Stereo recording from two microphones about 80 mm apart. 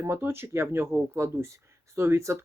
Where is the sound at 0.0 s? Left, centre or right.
Right.